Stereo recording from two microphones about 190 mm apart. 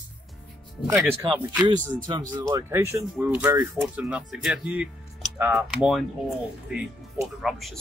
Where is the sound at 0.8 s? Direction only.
15° right (ahead or behind).